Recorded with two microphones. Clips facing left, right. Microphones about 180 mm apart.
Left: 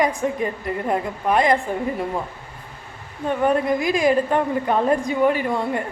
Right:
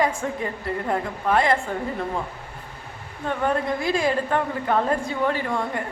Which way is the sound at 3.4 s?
15° left (ahead or behind).